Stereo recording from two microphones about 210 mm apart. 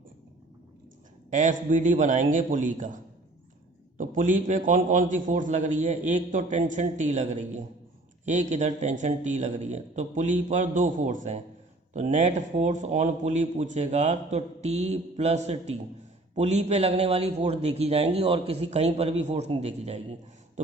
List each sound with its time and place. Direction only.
1.3 s a man's voice: 35° right (ahead or behind)